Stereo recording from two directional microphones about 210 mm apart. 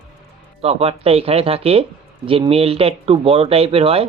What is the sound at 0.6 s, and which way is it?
Speech, 30° right (ahead or behind).